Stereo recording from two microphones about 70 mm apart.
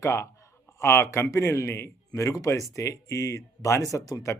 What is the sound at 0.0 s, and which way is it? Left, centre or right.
A man's voice, left.